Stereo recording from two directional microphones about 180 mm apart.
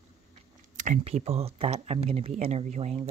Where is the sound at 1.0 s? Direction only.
35° right (ahead or behind).